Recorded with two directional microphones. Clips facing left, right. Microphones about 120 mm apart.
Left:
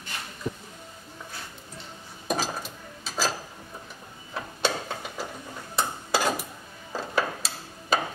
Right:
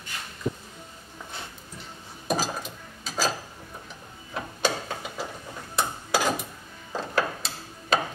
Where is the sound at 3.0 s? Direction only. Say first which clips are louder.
Right 1 dB; centre (ahead or behind).